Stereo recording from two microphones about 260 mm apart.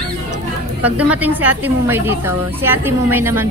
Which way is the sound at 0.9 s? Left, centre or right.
Centre.